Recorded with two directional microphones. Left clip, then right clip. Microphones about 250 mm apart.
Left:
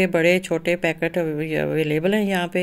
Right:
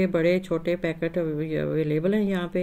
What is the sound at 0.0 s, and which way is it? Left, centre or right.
Speech, centre.